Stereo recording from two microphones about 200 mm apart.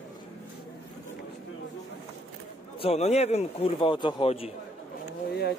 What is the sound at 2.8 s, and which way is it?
A man's voice, 30° left (ahead or behind).